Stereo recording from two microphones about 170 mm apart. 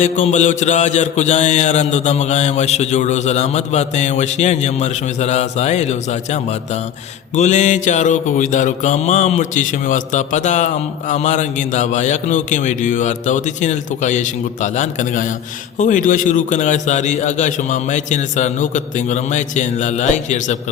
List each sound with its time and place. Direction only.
0.0 s mantra: 45° left (ahead or behind)
7.3 s a man's voice: 45° left (ahead or behind)